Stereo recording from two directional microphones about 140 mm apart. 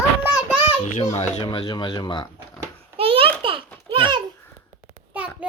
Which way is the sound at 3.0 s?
40° right (ahead or behind).